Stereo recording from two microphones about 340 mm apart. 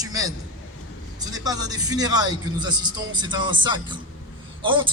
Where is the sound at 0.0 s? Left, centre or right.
Centre.